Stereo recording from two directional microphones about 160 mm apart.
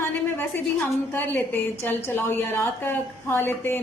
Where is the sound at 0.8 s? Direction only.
15° left (ahead or behind).